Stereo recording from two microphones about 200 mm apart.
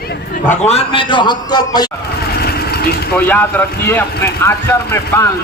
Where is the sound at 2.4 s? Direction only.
50° left (ahead or behind).